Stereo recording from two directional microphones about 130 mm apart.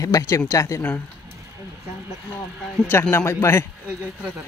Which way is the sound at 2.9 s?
20° left (ahead or behind).